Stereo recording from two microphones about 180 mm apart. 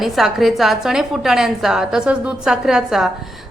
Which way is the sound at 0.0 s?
Centre (ahead or behind).